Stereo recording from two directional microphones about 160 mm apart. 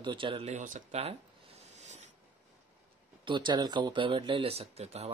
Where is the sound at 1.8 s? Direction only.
45° right (ahead or behind).